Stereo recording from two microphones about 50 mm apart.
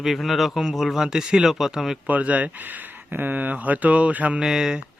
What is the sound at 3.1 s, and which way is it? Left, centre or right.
Mantra, right.